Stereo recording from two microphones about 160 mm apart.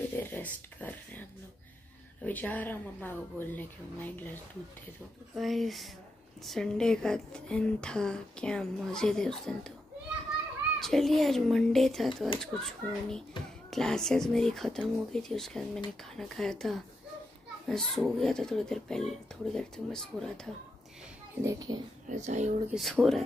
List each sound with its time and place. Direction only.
0.2 s a sound: 10° left (ahead or behind)
2.2 s speech: 10° left (ahead or behind)
5.3 s a woman's voice: centre (ahead or behind)
10.8 s a woman's voice: centre (ahead or behind)
21.4 s a child's voice: 20° right (ahead or behind)
22.1 s speech: 45° right (ahead or behind)
22.7 s a woman's voice: centre (ahead or behind)